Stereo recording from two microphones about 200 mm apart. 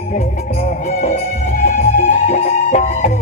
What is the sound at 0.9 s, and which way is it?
Music, 35° left (ahead or behind).